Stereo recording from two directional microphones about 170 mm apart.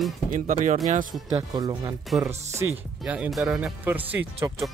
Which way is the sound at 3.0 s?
5° right (ahead or behind).